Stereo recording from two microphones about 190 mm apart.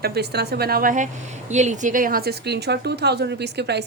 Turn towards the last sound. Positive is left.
turn(degrees=-60)  # may be behind; listen again after turning